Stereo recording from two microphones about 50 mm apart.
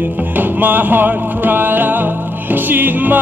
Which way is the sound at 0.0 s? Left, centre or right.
Right.